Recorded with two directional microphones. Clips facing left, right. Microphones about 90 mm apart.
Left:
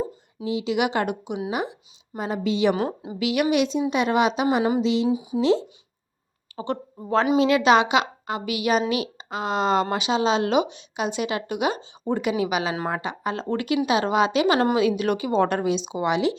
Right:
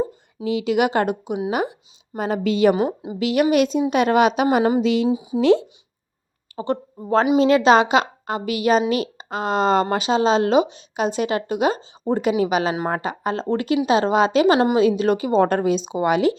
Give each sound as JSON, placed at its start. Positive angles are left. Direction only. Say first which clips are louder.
{"t": 0.4, "sound": "speech", "louder": "right 4 dB", "side_deg": -60}
{"t": 1.5, "sound": "a woman's voice", "louder": "right 5 dB", "side_deg": -55}
{"t": 2.8, "sound": "a woman's voice", "louder": "right 4 dB", "side_deg": -15}
{"t": 3.2, "sound": "a woman's voice", "louder": "right 4 dB", "side_deg": -40}
{"t": 5.0, "sound": "speech", "louder": "right 2 dB", "side_deg": -25}
{"t": 5.4, "sound": "a woman's voice", "louder": "right 5 dB", "side_deg": -60}
{"t": 6.6, "sound": "a woman's voice", "louder": "right 4 dB", "side_deg": -35}